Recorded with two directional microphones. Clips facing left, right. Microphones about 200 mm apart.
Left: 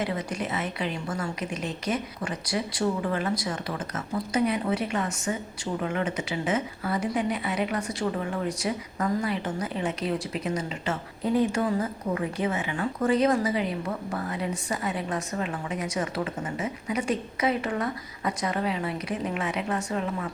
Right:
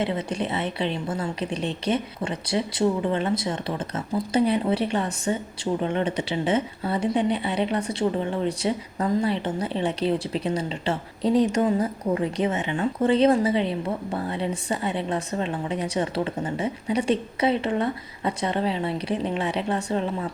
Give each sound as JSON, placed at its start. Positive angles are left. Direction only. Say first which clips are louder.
{"t": 0.0, "sound": "a woman's voice", "louder": "right 4 dB", "side_deg": -25}
{"t": 11.2, "sound": "speech", "louder": "right 4 dB", "side_deg": -85}
{"t": 11.5, "sound": "a woman's voice", "louder": "right 4 dB", "side_deg": -20}